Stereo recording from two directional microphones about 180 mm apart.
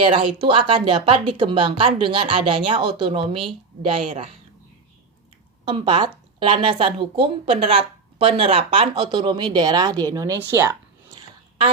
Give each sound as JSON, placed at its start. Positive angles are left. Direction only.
{"t": 0.1, "sound": "speech", "side_deg": -25}
{"t": 5.6, "sound": "speech", "side_deg": -25}